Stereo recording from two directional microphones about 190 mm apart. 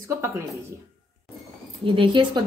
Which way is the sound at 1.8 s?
25° right (ahead or behind).